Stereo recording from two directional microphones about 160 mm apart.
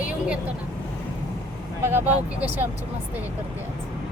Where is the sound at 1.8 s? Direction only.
15° right (ahead or behind).